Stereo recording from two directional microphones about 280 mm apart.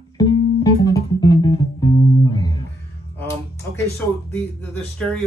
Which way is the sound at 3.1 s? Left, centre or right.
Centre.